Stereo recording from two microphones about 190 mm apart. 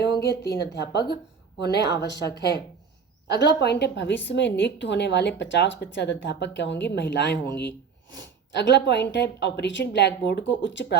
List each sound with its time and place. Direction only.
0.0 s a woman's voice: 60° left (ahead or behind)